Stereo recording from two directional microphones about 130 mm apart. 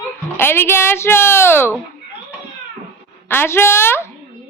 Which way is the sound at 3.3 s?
20° left (ahead or behind).